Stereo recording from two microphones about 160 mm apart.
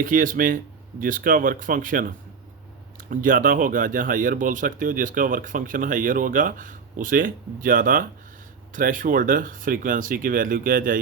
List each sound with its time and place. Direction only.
0.0 s speech: 55° right (ahead or behind)